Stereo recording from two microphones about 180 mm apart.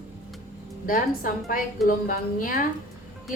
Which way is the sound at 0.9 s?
50° left (ahead or behind).